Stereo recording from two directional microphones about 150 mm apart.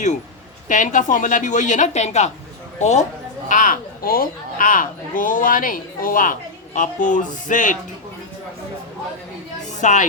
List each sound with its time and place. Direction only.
0.7 s a woman's voice: 55° left (ahead or behind)
3.5 s a woman's voice: 65° left (ahead or behind)
9.7 s speech: 55° left (ahead or behind)